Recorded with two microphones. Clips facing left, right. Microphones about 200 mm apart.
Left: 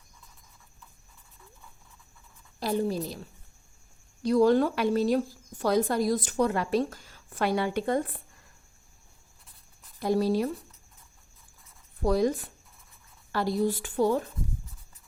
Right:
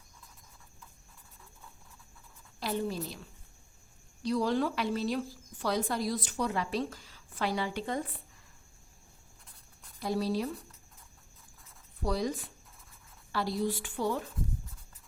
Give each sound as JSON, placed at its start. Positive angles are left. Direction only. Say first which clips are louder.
{"t": 2.6, "sound": "a woman's voice", "louder": "left 5 dB", "side_deg": 40}
{"t": 4.2, "sound": "a woman's voice", "louder": "left 8 dB", "side_deg": 50}
{"t": 10.0, "sound": "a woman's voice", "louder": "left 6 dB", "side_deg": 50}
{"t": 12.0, "sound": "a woman's voice", "louder": "left 7 dB", "side_deg": 50}